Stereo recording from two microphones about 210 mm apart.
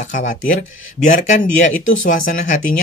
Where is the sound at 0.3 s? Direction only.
40° left (ahead or behind).